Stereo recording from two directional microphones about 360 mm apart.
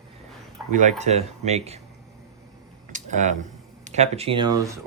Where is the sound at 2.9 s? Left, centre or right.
Centre.